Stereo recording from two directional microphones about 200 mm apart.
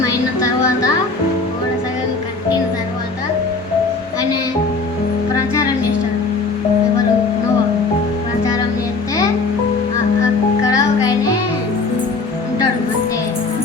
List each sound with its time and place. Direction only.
10.6 s music: 15° left (ahead or behind)